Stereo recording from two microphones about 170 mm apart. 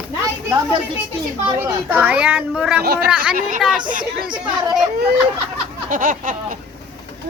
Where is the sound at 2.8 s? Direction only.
70° right (ahead or behind).